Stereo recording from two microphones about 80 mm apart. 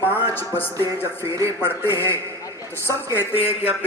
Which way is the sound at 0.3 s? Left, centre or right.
Left.